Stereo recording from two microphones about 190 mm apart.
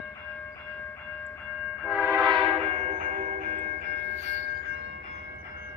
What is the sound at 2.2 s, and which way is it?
Train, 25° right (ahead or behind).